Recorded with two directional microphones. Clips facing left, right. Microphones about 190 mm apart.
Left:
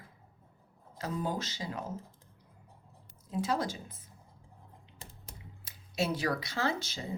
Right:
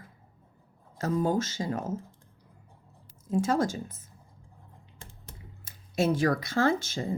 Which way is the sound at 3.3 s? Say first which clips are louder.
Right 6 dB; 45° right (ahead or behind).